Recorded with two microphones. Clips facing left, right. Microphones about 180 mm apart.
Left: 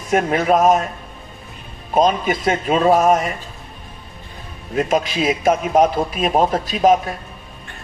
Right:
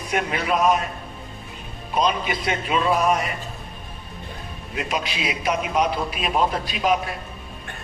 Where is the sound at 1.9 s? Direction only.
45° left (ahead or behind).